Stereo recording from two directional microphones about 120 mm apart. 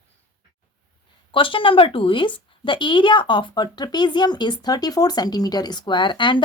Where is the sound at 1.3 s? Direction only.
45° left (ahead or behind).